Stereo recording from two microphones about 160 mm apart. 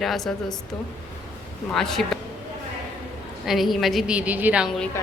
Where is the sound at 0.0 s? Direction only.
Centre (ahead or behind).